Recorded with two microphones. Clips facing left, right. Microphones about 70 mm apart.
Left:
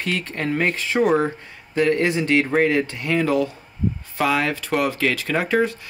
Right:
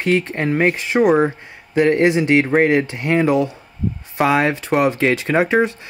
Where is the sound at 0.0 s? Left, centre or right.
Right.